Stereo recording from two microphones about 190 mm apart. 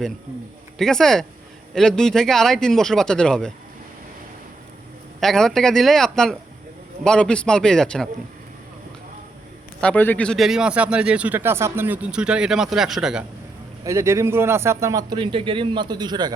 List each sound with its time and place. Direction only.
0.8 s speech: 5° left (ahead or behind)
5.2 s speech: centre (ahead or behind)
9.8 s speech: 10° left (ahead or behind)
13.8 s a man's voice: 15° right (ahead or behind)